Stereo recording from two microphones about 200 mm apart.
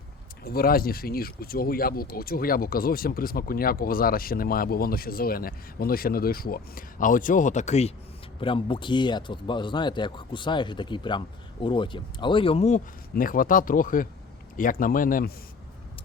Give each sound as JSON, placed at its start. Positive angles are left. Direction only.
{"t": 0.4, "sound": "a man's voice", "side_deg": 50}